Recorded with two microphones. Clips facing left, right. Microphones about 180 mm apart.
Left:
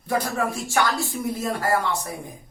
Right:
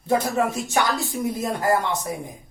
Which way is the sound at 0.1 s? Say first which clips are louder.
Right 3 dB; 20° right (ahead or behind).